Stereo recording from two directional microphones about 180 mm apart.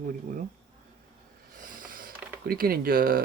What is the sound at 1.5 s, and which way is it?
Mechanisms, 50° right (ahead or behind).